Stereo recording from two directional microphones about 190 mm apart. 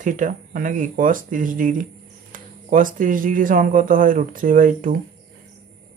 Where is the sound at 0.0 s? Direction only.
45° right (ahead or behind).